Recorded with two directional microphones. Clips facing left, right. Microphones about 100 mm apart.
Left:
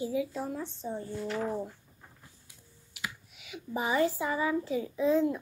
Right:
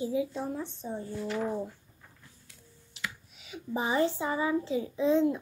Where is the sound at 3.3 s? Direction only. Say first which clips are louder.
Right 2 dB; 30° right (ahead or behind).